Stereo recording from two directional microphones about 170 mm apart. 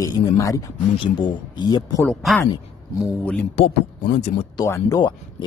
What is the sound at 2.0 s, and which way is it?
Speech, centre (ahead or behind).